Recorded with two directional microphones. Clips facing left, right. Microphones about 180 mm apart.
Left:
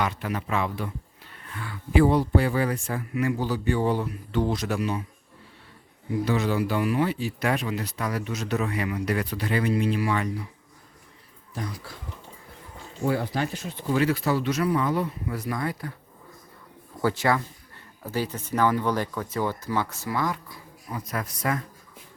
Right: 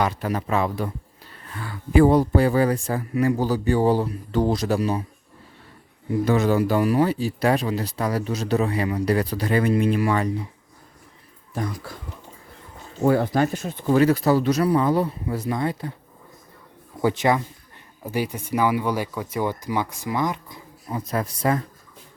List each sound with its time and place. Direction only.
0.0 s speech: 40° right (ahead or behind)
6.2 s speech: 45° right (ahead or behind)
11.5 s speech: 50° right (ahead or behind)
13.0 s speech: 50° right (ahead or behind); by 16.0 s 25° right (ahead or behind)
17.0 s speech: 20° right (ahead or behind)